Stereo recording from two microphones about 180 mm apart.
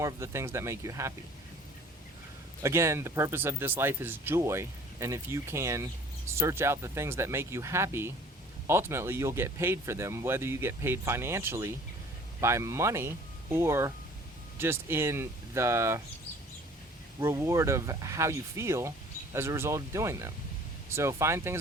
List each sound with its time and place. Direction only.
0.0 s speech: 15° right (ahead or behind)
2.6 s speech: 15° right (ahead or behind)
17.2 s speech: 15° right (ahead or behind)